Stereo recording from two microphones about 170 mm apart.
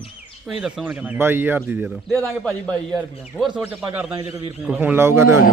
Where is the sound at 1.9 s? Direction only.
Centre (ahead or behind).